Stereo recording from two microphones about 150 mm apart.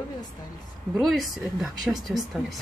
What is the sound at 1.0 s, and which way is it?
Speech, centre (ahead or behind).